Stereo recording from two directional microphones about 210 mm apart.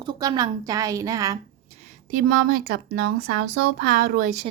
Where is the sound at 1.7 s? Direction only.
35° right (ahead or behind).